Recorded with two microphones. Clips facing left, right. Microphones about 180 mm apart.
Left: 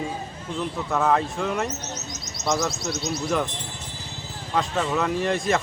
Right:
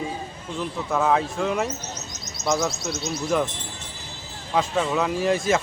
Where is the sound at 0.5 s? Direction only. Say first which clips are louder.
Even; centre (ahead or behind).